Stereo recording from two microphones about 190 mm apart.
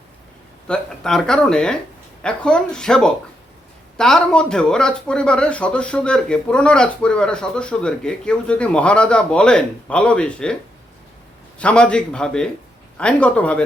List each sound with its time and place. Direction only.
0.7 s a man's voice: 5° left (ahead or behind)
11.6 s a man's voice: 5° left (ahead or behind)